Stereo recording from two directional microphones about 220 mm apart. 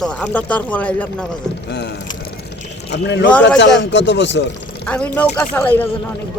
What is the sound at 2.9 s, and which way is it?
Speech, 50° left (ahead or behind).